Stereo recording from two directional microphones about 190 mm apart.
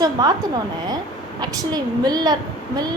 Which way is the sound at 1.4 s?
20° right (ahead or behind).